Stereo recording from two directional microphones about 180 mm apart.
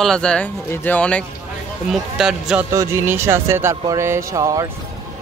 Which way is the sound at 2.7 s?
15° right (ahead or behind).